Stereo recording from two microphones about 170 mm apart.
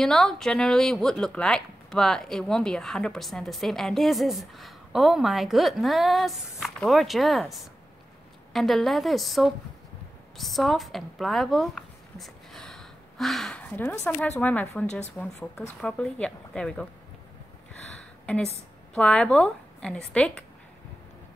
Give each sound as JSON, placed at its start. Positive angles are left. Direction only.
{"t": 0.0, "sound": "a woman's voice", "side_deg": 0}
{"t": 18.2, "sound": "a woman's voice", "side_deg": 5}